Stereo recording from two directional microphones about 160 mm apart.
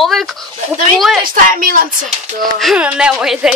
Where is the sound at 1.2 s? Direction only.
60° right (ahead or behind).